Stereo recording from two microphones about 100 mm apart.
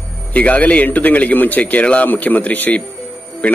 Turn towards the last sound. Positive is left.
turn(degrees=15)  # may be behind; listen again after turning